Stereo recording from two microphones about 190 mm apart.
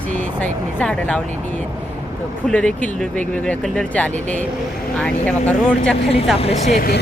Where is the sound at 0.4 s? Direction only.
5° left (ahead or behind).